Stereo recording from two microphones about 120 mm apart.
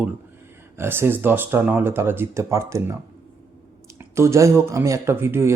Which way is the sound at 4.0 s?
25° right (ahead or behind).